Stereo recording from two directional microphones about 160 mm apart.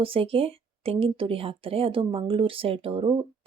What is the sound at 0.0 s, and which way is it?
Speech, 35° right (ahead or behind).